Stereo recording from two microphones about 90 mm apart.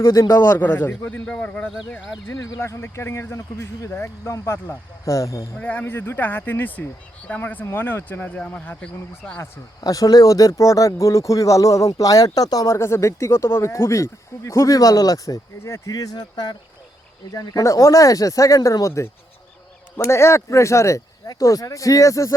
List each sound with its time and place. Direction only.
0.0 s a man's voice: 30° left (ahead or behind)
2.2 s a man's voice: 30° left (ahead or behind)
5.5 s a man's voice: 15° left (ahead or behind)
9.8 s speech: 45° left (ahead or behind)
12.6 s speech: 30° left (ahead or behind)
20.1 s speech: 30° left (ahead or behind)